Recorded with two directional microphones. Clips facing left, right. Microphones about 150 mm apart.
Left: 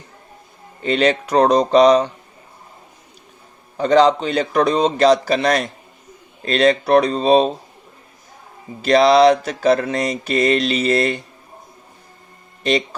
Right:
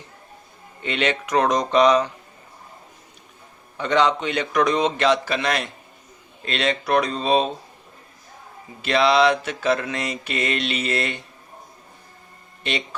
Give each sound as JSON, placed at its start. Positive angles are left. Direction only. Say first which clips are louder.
{"t": 0.8, "sound": "mantra", "louder": "left 7 dB", "side_deg": 35}
{"t": 3.8, "sound": "mantra", "louder": "left 6 dB", "side_deg": 35}
{"t": 8.8, "sound": "mantra", "louder": "left 6 dB", "side_deg": 40}
{"t": 12.6, "sound": "mantra", "louder": "left 8 dB", "side_deg": 40}